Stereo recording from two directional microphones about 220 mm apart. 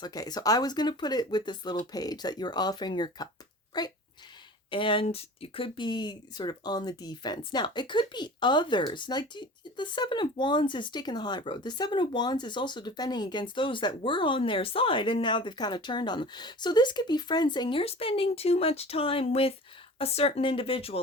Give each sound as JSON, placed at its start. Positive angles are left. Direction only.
{"t": 0.0, "sound": "speech", "side_deg": 15}